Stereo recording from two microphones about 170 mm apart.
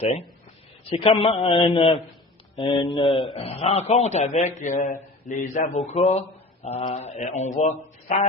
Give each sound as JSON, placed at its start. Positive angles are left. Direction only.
{"t": 0.9, "sound": "a man's voice", "side_deg": 35}